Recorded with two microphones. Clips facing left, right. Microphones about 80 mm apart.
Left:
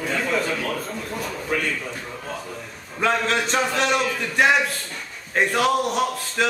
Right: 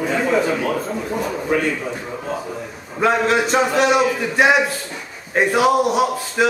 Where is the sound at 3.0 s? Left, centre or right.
Centre.